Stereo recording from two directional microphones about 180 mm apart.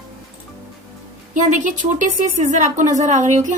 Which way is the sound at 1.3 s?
45° right (ahead or behind).